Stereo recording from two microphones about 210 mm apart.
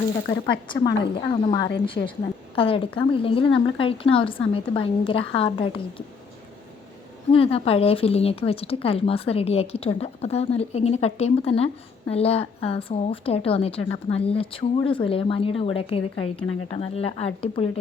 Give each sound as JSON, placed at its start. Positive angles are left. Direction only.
{"t": 0.3, "sound": "a woman's voice", "side_deg": 25}
{"t": 2.0, "sound": "a woman's voice", "side_deg": 35}
{"t": 7.3, "sound": "a woman's voice", "side_deg": 25}